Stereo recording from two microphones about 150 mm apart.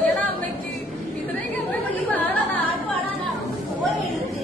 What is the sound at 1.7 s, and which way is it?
Chatter, 10° left (ahead or behind).